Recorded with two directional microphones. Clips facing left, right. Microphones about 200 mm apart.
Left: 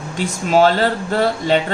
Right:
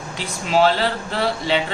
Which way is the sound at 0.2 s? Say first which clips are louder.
Left 4 dB; 45° left (ahead or behind).